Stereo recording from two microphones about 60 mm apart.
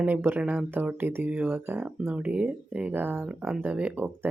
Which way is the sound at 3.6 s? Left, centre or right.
Right.